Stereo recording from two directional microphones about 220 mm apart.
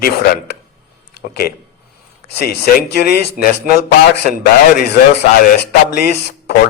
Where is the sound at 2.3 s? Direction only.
45° left (ahead or behind).